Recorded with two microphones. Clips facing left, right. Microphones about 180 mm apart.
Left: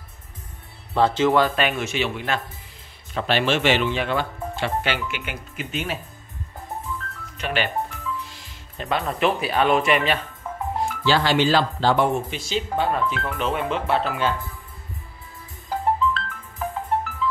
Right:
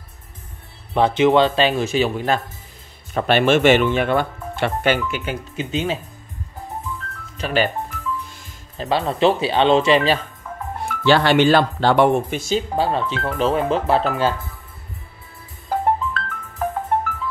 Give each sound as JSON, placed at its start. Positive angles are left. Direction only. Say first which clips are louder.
{"t": 0.9, "sound": "a man's voice", "louder": "right 3 dB", "side_deg": -20}
{"t": 3.2, "sound": "speech", "louder": "right 6 dB", "side_deg": -55}
{"t": 5.6, "sound": "a man's voice", "louder": "right 5 dB", "side_deg": -25}
{"t": 7.3, "sound": "speech", "louder": "right 5 dB", "side_deg": -35}
{"t": 8.3, "sound": "music", "louder": "right 2 dB", "side_deg": -50}
{"t": 8.7, "sound": "a man's voice", "louder": "right 4 dB", "side_deg": -30}
{"t": 10.8, "sound": "speech", "louder": "right 5 dB", "side_deg": -60}
{"t": 12.4, "sound": "speech", "louder": "right 1 dB", "side_deg": -40}
{"t": 15.7, "sound": "music", "louder": "right 2 dB", "side_deg": -50}